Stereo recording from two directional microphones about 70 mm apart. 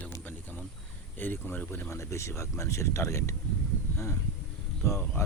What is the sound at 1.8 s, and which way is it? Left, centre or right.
Speech, left.